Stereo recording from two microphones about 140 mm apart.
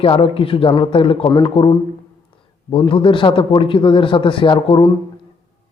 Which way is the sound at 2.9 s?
35° left (ahead or behind).